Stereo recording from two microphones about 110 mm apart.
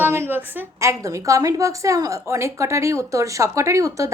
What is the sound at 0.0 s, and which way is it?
A woman's voice, 20° right (ahead or behind).